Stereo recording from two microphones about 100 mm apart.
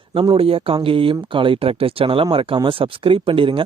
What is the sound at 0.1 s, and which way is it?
A man's voice, 60° right (ahead or behind).